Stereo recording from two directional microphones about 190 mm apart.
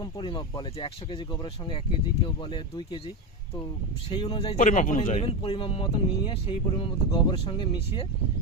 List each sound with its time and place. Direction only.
0.0 s speech: 25° left (ahead or behind)
4.1 s speech: 25° left (ahead or behind)
4.5 s speech: 40° left (ahead or behind); by 8.0 s 25° left (ahead or behind)